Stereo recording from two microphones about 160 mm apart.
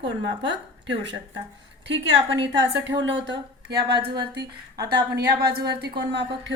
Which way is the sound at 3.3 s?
85° right.